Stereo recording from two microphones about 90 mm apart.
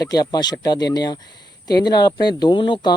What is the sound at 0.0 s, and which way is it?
Speech, 45° left (ahead or behind).